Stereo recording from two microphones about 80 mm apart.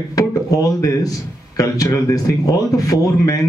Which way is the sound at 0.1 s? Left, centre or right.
Left.